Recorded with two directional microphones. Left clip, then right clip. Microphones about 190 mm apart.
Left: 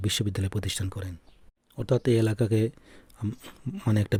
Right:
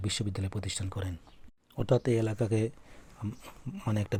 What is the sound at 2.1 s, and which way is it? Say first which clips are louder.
Speech: left 5 dB; 55° left (ahead or behind).